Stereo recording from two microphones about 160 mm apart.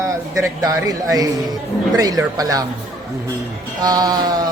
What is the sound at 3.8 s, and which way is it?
Speech, 25° right (ahead or behind).